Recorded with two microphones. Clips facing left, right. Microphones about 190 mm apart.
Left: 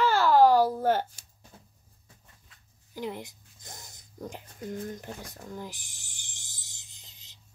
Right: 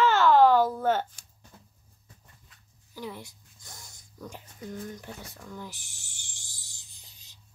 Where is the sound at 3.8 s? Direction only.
20° left (ahead or behind).